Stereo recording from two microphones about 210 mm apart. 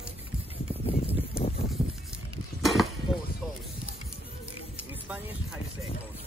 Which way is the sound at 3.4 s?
Centre (ahead or behind).